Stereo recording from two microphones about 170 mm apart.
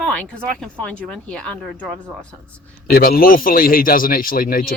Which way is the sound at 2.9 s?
65° left (ahead or behind).